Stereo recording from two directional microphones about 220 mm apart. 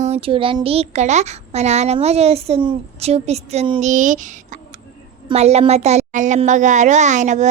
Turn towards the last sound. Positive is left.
turn(degrees=-35)  # may be behind; listen again after turning